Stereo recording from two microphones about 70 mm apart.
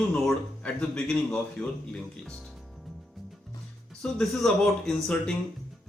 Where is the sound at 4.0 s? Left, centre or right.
Centre.